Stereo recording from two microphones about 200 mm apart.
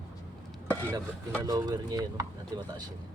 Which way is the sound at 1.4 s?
20° right (ahead or behind).